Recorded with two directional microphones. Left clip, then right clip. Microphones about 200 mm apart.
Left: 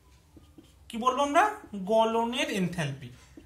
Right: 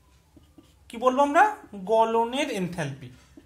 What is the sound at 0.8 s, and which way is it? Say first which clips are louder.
A man's voice: right 5 dB; 40° right (ahead or behind).